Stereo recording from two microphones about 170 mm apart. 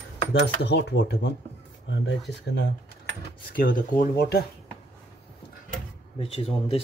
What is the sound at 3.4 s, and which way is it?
Speech, 55° left (ahead or behind).